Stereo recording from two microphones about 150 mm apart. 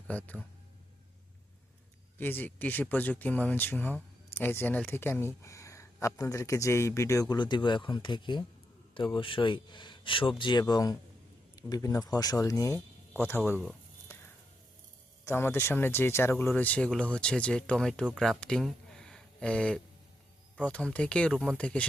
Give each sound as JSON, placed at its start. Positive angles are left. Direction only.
{"t": 0.1, "sound": "speech", "side_deg": 10}
{"t": 2.1, "sound": "speech", "side_deg": 15}
{"t": 15.2, "sound": "speech", "side_deg": 15}